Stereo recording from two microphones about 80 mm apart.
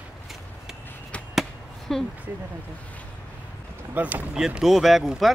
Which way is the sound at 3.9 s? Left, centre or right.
Right.